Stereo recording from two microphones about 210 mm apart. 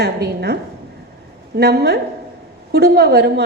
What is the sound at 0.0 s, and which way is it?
A woman's voice, 50° right (ahead or behind).